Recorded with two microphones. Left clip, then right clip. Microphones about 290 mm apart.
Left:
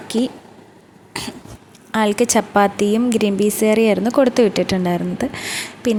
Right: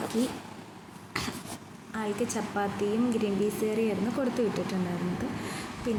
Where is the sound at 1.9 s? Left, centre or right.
Left.